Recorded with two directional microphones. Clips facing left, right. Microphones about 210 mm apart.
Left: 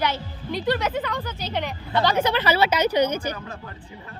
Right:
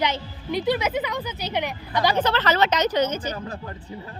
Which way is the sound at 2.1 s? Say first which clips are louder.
Even; 10° left (ahead or behind).